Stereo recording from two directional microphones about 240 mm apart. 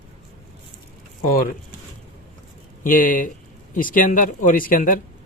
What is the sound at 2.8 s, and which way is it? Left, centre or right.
Speech, left.